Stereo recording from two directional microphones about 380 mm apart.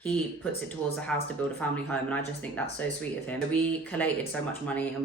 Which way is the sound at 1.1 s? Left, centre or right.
Centre.